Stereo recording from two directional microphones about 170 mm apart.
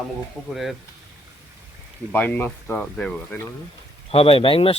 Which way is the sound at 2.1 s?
10° left (ahead or behind).